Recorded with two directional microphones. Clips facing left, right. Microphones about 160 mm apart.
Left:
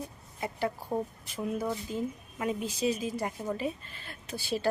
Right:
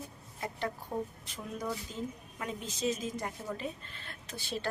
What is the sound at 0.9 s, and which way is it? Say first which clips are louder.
Speech: left 4 dB; 20° left (ahead or behind).